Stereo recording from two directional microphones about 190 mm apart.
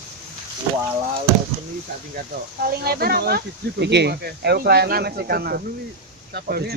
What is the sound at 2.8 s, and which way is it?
Speech, 55° right (ahead or behind).